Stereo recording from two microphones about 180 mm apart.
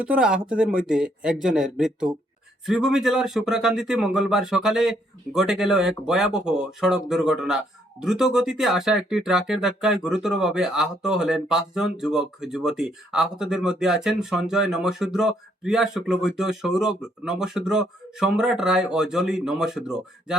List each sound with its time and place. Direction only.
0.0 s speech: 5° right (ahead or behind)